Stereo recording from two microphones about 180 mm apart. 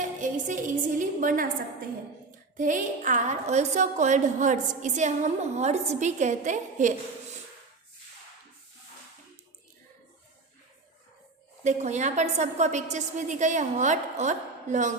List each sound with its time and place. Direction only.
0.0 s a woman's voice: 45° right (ahead or behind)
2.6 s a woman's voice: 45° right (ahead or behind)
11.6 s a woman's voice: 40° right (ahead or behind)